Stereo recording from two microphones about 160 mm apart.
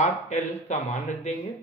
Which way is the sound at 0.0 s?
45° left (ahead or behind).